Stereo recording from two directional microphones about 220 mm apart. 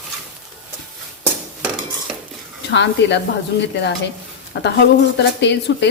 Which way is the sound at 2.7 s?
50° left (ahead or behind).